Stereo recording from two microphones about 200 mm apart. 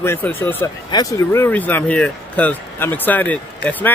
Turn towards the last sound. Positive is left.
turn(degrees=10)  # may be behind; listen again after turning